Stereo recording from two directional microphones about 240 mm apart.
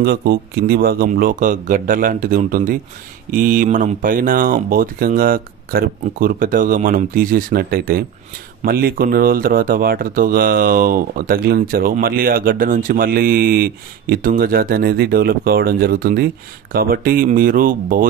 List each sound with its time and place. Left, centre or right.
0.0 s speech: right